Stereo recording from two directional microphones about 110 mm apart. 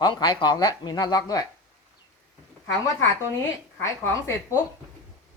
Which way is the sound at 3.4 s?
25° left (ahead or behind).